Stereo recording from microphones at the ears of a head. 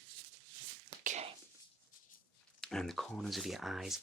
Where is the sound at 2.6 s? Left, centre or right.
Centre.